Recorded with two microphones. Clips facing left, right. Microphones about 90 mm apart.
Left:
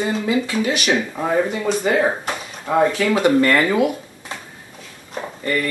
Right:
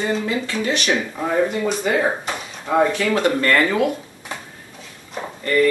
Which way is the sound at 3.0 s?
20° left (ahead or behind).